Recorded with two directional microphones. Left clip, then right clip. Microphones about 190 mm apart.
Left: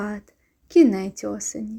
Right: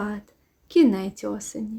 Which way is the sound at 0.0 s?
15° left (ahead or behind).